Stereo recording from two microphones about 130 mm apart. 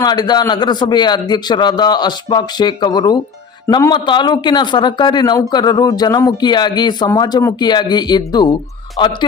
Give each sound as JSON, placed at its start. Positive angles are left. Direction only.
{"t": 0.0, "sound": "a man's voice", "side_deg": 30}